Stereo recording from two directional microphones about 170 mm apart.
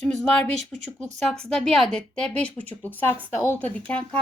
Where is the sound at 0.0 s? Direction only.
5° left (ahead or behind).